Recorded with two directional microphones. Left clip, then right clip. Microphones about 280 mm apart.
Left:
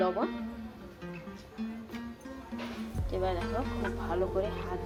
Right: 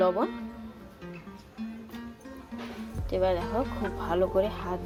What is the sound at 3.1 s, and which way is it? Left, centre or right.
Speech, right.